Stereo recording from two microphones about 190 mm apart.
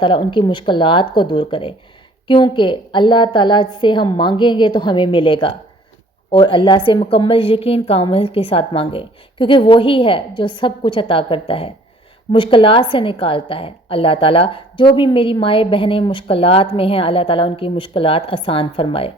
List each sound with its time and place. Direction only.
0.0 s a woman's voice: 25° left (ahead or behind)